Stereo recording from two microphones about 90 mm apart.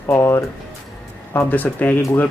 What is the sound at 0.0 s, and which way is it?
Speech, 30° left (ahead or behind).